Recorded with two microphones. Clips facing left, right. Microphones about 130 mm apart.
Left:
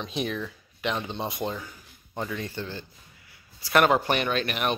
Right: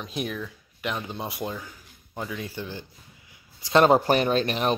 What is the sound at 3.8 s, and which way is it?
Speech, 35° right (ahead or behind).